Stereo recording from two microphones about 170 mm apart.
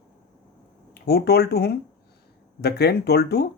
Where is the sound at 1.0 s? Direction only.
70° left (ahead or behind).